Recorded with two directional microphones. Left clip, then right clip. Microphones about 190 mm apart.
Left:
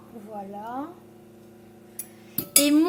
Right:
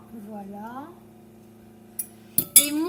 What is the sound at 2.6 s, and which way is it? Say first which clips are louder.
Speech: left 8 dB; 35° left (ahead or behind).